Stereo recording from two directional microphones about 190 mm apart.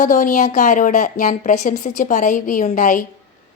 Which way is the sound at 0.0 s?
40° left (ahead or behind).